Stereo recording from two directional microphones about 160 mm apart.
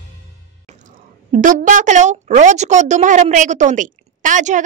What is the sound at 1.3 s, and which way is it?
A woman's voice, 55° right (ahead or behind).